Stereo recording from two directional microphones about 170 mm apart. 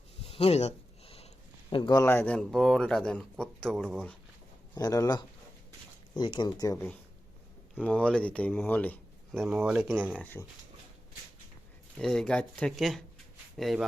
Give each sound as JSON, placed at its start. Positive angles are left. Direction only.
{"t": 0.2, "sound": "a sound", "side_deg": 35}
{"t": 1.7, "sound": "speech", "side_deg": 25}
{"t": 2.0, "sound": "speech", "side_deg": 10}
{"t": 4.8, "sound": "speech", "side_deg": 20}
{"t": 7.9, "sound": "speech", "side_deg": 5}
{"t": 9.4, "sound": "speech", "side_deg": -5}
{"t": 10.2, "sound": "speech", "side_deg": 10}
{"t": 11.9, "sound": "speech", "side_deg": 5}